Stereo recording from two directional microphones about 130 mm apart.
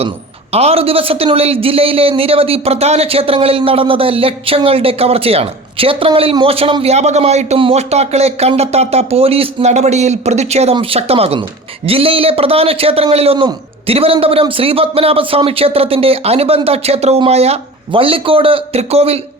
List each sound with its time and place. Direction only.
0.5 s a man's voice: 50° right (ahead or behind)
6.9 s a man's voice: 60° right (ahead or behind)